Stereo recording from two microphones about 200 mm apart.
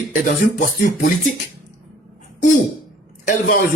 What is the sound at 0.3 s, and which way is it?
Speech, 40° left (ahead or behind).